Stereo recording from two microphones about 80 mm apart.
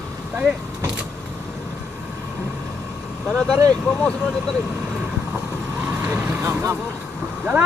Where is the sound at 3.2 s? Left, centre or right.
Centre.